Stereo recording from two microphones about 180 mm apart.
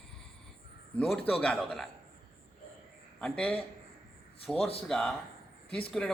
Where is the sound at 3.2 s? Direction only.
5° left (ahead or behind).